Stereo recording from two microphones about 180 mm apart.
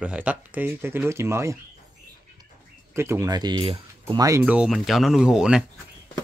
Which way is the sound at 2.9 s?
15° right (ahead or behind).